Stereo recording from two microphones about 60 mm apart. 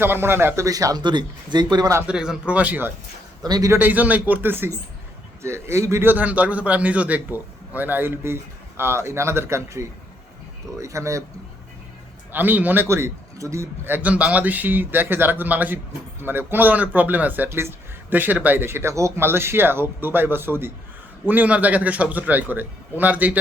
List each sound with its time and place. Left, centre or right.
0.0 s speech: right
0.6 s speech: right
2.0 s a man's voice: centre; by 2.9 s right
3.4 s a man's voice: right
3.8 s a man's voice: right
5.4 s speech: right
6.1 s a man's voice: right
12.3 s speech: right
12.9 s speech: right
13.8 s speech: right
18.1 s speech: right
18.9 s speech: right
19.2 s speech: right
21.2 s a man's voice: right